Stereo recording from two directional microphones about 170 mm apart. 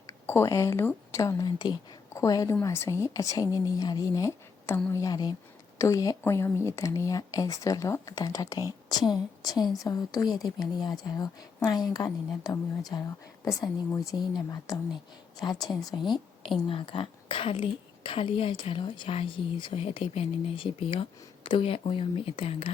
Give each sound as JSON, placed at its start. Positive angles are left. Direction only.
{"t": 0.3, "sound": "a woman's voice", "side_deg": 15}
{"t": 15.7, "sound": "a woman's voice", "side_deg": 0}
{"t": 16.0, "sound": "a woman's voice", "side_deg": 25}